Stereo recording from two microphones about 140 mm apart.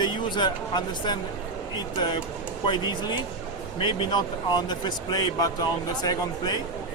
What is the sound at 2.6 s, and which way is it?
Speech, 35° left (ahead or behind).